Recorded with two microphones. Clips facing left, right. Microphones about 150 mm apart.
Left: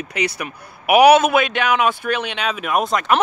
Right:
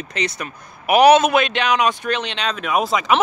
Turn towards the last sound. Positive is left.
turn(degrees=0)  # may be behind; listen again after turning